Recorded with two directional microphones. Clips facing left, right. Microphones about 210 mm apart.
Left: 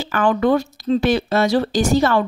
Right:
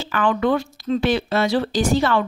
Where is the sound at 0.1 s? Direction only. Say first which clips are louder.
Left 3 dB; 40° left (ahead or behind).